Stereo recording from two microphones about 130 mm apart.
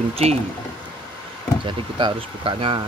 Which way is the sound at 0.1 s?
55° right (ahead or behind).